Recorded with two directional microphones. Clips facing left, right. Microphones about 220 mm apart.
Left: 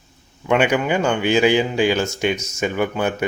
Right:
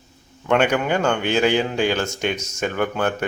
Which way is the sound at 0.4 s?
10° left (ahead or behind).